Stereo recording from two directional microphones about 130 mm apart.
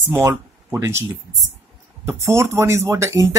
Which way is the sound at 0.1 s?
15° right (ahead or behind).